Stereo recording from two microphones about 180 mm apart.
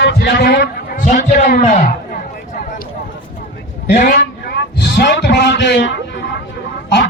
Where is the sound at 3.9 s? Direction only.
50° left (ahead or behind).